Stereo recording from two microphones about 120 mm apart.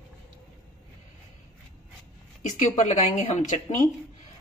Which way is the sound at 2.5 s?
90° left.